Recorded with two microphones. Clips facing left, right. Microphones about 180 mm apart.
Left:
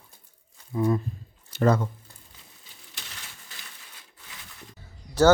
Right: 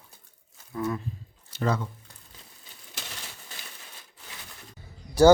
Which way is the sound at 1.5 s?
50° left (ahead or behind).